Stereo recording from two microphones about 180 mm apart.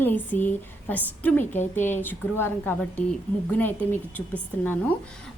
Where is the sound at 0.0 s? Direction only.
10° left (ahead or behind).